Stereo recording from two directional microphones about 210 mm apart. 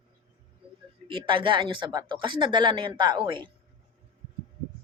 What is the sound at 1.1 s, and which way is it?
Speech, 25° right (ahead or behind).